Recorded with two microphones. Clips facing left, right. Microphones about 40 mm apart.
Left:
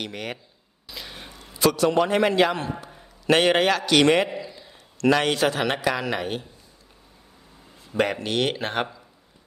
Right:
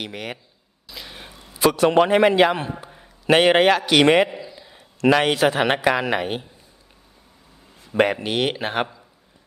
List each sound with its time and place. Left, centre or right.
0.0 s speech: centre
0.9 s a sound: centre
1.7 s a man's voice: right
2.1 s a man's voice: centre
4.3 s a sound: centre
5.5 s a man's voice: right
7.9 s speech: centre